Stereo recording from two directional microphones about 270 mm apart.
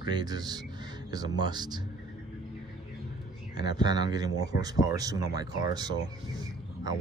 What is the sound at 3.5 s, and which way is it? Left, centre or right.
Speech, centre.